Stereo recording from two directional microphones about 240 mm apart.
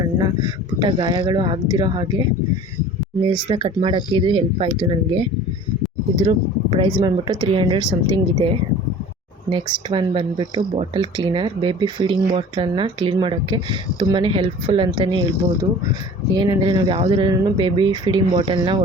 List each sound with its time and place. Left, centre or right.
0.2 s speech: centre
3.2 s speech: centre
16.3 s speech: centre